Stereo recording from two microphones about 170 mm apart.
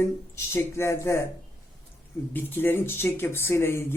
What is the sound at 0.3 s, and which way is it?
Speech, 15° left (ahead or behind).